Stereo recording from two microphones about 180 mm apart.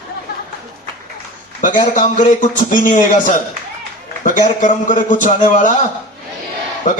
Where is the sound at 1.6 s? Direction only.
45° left (ahead or behind).